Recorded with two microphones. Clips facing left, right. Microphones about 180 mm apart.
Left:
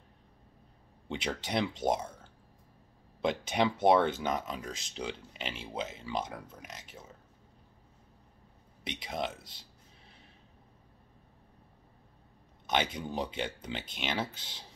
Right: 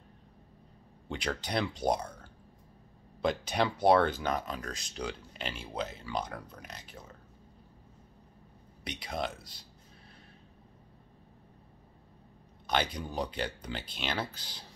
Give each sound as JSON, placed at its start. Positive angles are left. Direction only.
{"t": 1.0, "sound": "speech", "side_deg": 20}
{"t": 3.2, "sound": "speech", "side_deg": 20}
{"t": 8.8, "sound": "speech", "side_deg": 20}
{"t": 12.6, "sound": "speech", "side_deg": 20}